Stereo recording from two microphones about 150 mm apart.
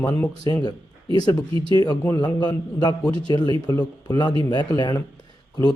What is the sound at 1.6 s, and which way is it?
Speech, 25° left (ahead or behind).